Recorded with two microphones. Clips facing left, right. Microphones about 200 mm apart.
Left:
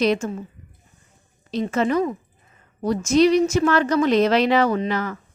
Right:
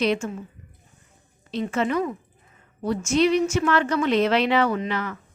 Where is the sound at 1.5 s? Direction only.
40° left (ahead or behind).